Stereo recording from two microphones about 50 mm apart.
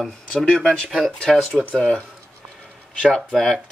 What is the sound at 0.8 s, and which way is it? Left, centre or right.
Speech, centre.